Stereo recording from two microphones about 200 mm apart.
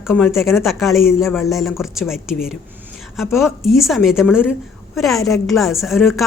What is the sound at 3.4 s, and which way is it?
A woman's voice, centre (ahead or behind).